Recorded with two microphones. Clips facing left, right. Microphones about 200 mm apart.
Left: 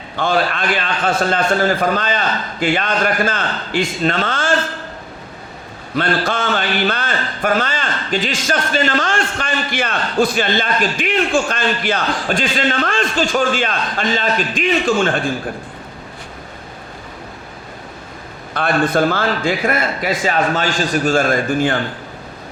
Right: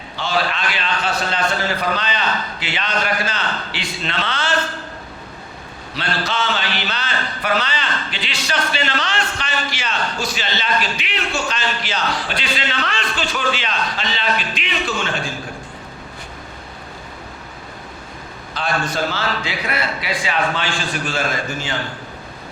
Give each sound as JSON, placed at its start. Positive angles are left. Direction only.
{"t": 0.2, "sound": "a man's voice", "side_deg": 50}
{"t": 5.9, "sound": "a man's voice", "side_deg": 50}
{"t": 18.5, "sound": "a man's voice", "side_deg": 55}